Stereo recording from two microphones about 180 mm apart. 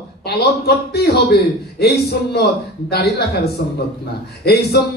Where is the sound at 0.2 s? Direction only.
65° left (ahead or behind).